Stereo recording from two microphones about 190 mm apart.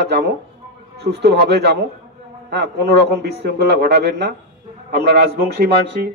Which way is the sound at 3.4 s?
60° right (ahead or behind).